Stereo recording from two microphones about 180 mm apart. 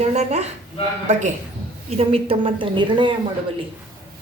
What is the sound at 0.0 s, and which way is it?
A man's voice, 40° right (ahead or behind).